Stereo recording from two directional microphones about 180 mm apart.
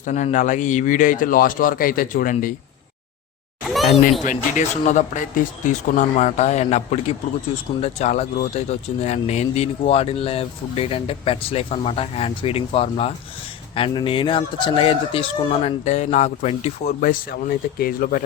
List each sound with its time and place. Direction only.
0.0 s speech: 45° left (ahead or behind)
4.3 s speech: 40° left (ahead or behind)